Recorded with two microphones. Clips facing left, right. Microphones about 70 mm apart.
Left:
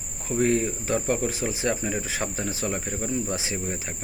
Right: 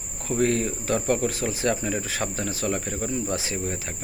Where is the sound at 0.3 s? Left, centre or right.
Centre.